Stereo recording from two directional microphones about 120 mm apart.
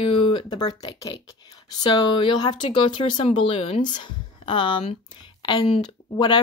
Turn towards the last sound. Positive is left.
turn(degrees=40)  # may be behind; listen again after turning